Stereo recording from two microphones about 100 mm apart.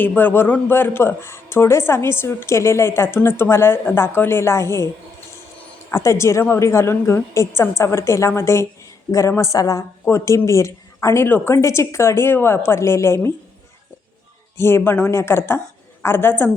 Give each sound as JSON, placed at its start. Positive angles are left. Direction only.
{"t": 0.2, "sound": "a woman's voice", "side_deg": 20}
{"t": 5.9, "sound": "a woman's voice", "side_deg": 30}
{"t": 14.6, "sound": "a woman's voice", "side_deg": 25}